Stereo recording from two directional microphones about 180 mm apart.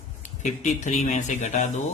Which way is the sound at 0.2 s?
40° left (ahead or behind).